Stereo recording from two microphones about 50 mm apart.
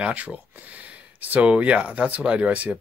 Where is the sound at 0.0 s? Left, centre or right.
Right.